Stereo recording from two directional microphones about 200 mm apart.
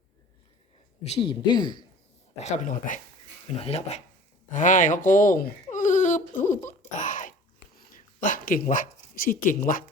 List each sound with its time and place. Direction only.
1.0 s speech: 30° left (ahead or behind)
2.4 s speech: 40° left (ahead or behind)
6.5 s a sound: 40° left (ahead or behind)
7.9 s speech: 40° left (ahead or behind)